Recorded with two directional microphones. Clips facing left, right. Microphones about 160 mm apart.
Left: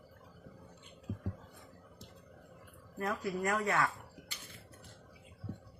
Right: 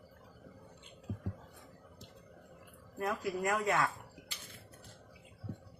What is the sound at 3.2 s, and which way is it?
Speech, 15° right (ahead or behind).